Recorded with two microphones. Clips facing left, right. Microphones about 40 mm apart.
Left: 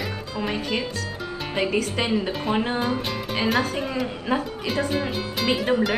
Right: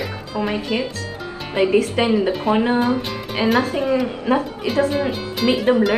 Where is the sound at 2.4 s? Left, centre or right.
Right.